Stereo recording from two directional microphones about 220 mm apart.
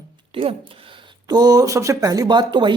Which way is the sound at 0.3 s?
25° right (ahead or behind).